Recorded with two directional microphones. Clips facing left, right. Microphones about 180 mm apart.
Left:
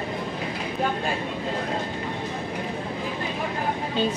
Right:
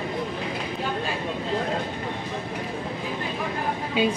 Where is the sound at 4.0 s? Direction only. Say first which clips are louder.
Right 2 dB; 10° right (ahead or behind).